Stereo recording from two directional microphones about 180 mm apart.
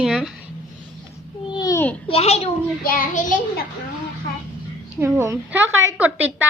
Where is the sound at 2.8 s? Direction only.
50° left (ahead or behind).